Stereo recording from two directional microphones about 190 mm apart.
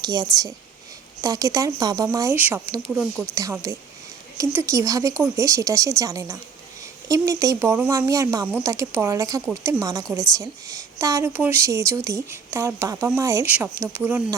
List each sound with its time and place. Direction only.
0.0 s a woman's voice: 20° right (ahead or behind); by 3.3 s centre (ahead or behind)
3.3 s a woman's voice: 15° right (ahead or behind)
10.2 s a woman's voice: 20° right (ahead or behind)